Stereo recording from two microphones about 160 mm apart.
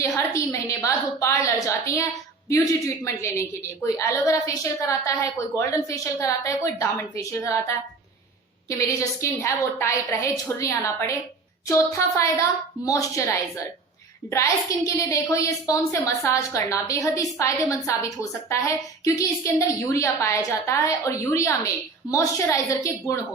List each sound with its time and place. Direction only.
0.3 s a woman's voice: 20° left (ahead or behind)
8.8 s a woman's voice: 20° left (ahead or behind)